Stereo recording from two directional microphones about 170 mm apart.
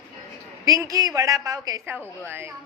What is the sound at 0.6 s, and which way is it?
A woman's voice, 20° right (ahead or behind).